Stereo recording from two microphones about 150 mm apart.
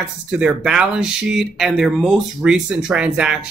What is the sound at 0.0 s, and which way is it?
Speech, 5° right (ahead or behind).